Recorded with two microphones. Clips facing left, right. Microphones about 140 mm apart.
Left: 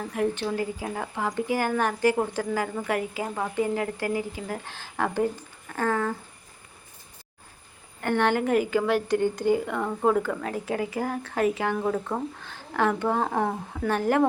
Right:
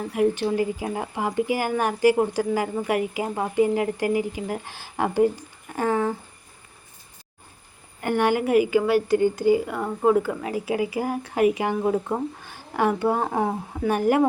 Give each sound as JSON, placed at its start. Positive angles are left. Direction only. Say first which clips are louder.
{"t": 0.1, "sound": "a woman's voice", "louder": "right 5 dB", "side_deg": -10}
{"t": 8.0, "sound": "a woman's voice", "louder": "right 2 dB", "side_deg": -10}